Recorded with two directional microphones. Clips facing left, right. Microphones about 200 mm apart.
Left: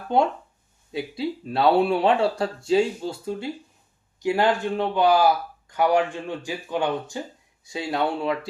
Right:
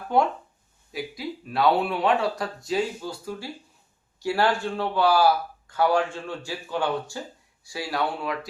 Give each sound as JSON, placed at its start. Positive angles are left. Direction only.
{"t": 0.1, "sound": "speech", "side_deg": 25}